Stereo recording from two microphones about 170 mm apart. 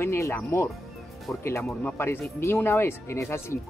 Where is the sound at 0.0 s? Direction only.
15° left (ahead or behind).